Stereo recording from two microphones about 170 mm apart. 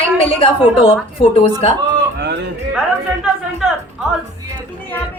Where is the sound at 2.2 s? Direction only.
85° right.